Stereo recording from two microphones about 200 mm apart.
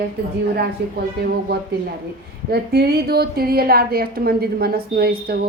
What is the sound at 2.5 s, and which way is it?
Speech, 50° right (ahead or behind).